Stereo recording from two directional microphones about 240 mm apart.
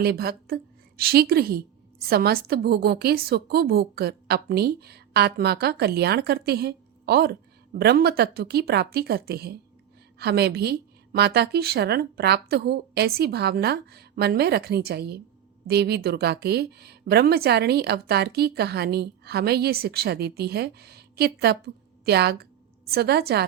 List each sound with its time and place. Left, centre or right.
0.0 s a woman's voice: right